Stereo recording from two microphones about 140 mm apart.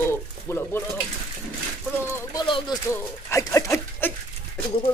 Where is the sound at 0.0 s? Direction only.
15° left (ahead or behind).